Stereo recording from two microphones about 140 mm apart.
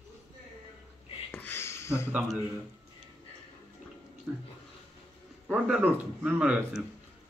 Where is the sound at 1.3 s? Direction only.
15° left (ahead or behind).